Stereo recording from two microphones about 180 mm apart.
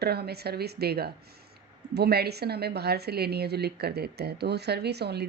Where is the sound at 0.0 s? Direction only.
65° right (ahead or behind).